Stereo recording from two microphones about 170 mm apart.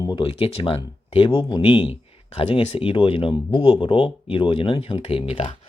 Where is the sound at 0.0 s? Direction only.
30° left (ahead or behind).